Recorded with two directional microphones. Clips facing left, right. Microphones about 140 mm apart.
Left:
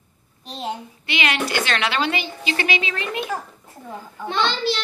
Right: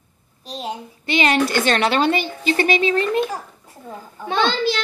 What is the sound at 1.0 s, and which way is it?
Speech, 40° right (ahead or behind).